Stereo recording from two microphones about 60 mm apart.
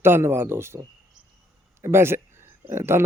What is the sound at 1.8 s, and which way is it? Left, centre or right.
A man's voice, right.